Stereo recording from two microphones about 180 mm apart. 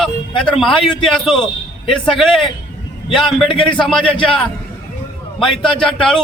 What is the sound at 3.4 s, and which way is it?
Speech, 30° left (ahead or behind).